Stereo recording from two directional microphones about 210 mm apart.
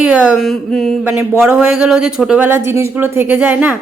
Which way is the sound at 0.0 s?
5° right (ahead or behind).